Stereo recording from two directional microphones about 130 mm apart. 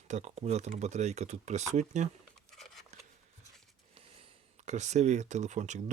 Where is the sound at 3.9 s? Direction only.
50° right (ahead or behind); by 5.8 s 65° right (ahead or behind).